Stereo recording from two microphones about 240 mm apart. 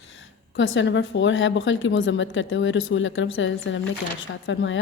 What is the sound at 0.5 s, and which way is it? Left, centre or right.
A woman's voice, left.